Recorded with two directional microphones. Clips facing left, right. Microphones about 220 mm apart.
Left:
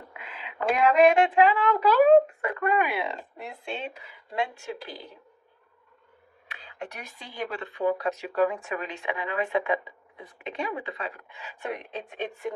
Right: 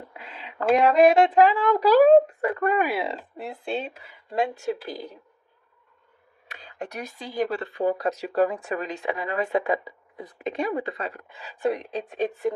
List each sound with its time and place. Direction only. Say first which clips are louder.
0.1 s a sound: right 1 dB; 35° right (ahead or behind)
0.8 s speech: right 2 dB; 35° right (ahead or behind)
6.5 s speech: right 4 dB; 40° right (ahead or behind)